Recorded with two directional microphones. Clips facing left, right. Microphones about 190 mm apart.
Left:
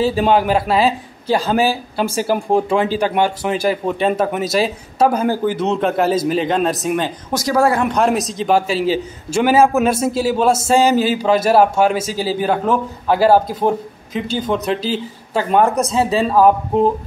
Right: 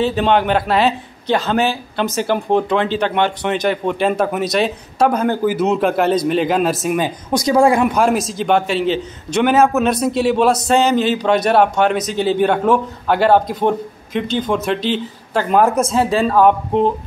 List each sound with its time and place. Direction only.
0.0 s a man's voice: 5° left (ahead or behind)
5.4 s a man's voice: 5° right (ahead or behind)
7.3 s speech: 15° right (ahead or behind)
7.8 s a man's voice: 5° right (ahead or behind)